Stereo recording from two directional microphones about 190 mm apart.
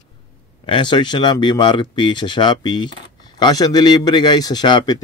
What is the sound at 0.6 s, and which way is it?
Speech, 25° left (ahead or behind).